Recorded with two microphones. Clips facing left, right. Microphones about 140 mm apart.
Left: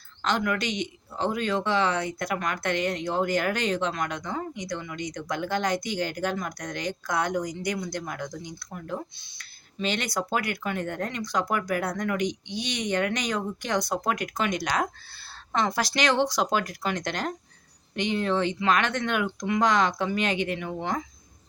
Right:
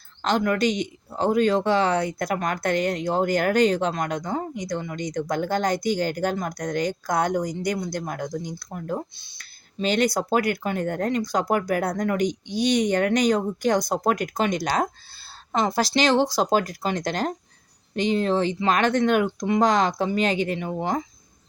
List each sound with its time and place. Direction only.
0.2 s speech: 40° right (ahead or behind)